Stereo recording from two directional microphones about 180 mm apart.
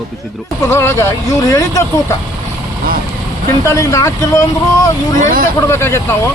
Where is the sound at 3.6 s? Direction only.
15° left (ahead or behind).